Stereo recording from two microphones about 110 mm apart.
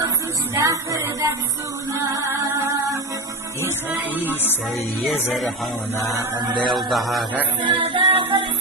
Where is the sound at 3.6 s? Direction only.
15° right (ahead or behind).